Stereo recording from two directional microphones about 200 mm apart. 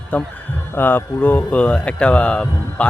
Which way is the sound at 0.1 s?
10° left (ahead or behind).